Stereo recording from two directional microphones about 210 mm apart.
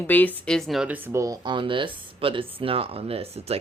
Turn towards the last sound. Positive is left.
turn(degrees=-30)  # may be behind; listen again after turning